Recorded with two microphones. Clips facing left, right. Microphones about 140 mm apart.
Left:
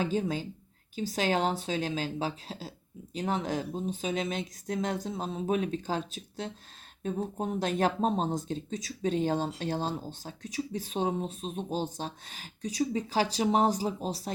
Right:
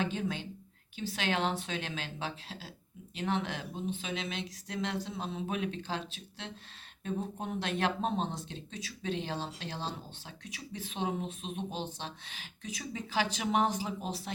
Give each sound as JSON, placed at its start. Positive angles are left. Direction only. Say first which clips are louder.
{"t": 0.0, "sound": "speech", "louder": "left 4 dB", "side_deg": 40}